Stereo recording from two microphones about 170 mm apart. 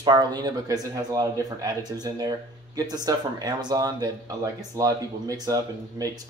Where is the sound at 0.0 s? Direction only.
25° right (ahead or behind).